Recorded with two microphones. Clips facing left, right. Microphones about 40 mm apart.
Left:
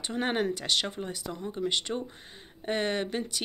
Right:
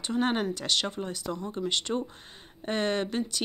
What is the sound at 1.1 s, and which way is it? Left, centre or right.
Speech, centre.